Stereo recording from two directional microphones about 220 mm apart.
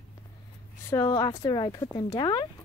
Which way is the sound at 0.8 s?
15° left (ahead or behind).